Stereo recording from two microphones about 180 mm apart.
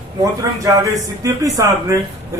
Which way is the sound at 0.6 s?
20° right (ahead or behind).